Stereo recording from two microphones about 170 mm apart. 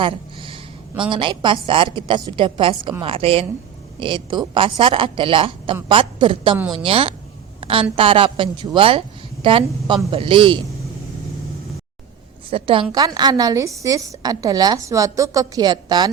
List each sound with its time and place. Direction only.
0.0 s a sound: 30° right (ahead or behind)
1.1 s a woman's voice: 30° right (ahead or behind)
12.5 s a woman's voice: 30° right (ahead or behind)